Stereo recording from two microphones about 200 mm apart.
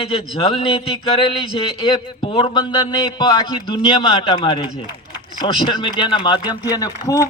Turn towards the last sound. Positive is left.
turn(degrees=15)  # may be behind; listen again after turning